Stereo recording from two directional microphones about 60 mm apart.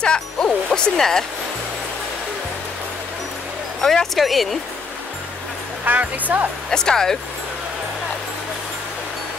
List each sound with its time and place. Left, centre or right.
0.0 s speech: centre
3.8 s speech: centre
5.9 s speech: right
6.7 s speech: centre